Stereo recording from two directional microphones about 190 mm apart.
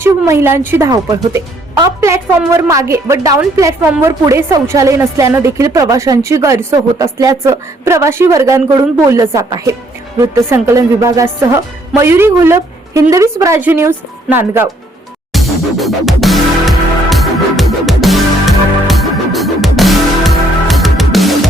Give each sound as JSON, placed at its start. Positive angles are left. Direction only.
{"t": 0.0, "sound": "a woman's voice", "side_deg": -15}
{"t": 15.3, "sound": "music", "side_deg": 0}